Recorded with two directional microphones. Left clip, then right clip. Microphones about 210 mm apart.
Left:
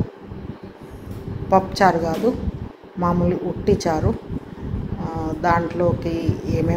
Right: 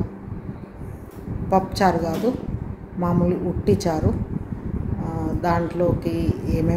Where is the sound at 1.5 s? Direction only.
25° right (ahead or behind).